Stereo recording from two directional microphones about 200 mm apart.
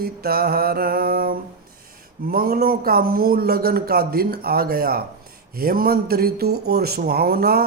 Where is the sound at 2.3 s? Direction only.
50° right (ahead or behind).